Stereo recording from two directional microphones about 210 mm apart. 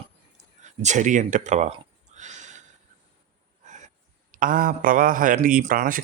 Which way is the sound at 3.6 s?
35° right (ahead or behind).